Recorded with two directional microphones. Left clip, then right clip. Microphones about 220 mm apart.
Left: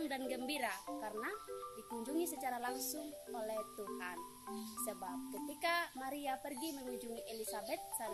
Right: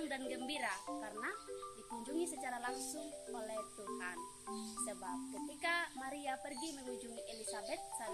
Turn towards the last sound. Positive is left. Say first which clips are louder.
# left 1 dB
turn(degrees=40)  # may be behind; listen again after turning